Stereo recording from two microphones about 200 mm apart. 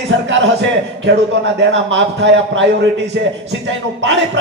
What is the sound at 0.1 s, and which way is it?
A man's voice, 70° right (ahead or behind).